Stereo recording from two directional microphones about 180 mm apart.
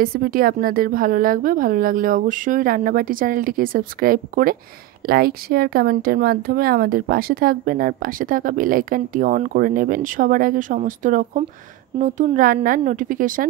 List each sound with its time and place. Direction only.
0.0 s speech: 50° right (ahead or behind)